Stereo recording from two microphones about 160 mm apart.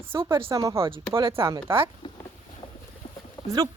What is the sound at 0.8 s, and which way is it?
Speech, 30° right (ahead or behind).